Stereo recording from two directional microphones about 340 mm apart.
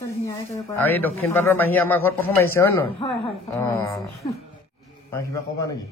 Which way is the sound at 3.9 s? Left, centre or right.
Centre.